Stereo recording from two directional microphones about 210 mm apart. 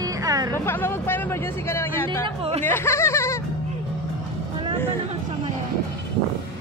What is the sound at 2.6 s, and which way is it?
Speech, 10° left (ahead or behind).